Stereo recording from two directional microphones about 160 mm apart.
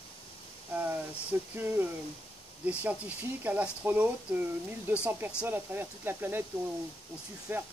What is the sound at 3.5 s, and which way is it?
Speech, 10° right (ahead or behind).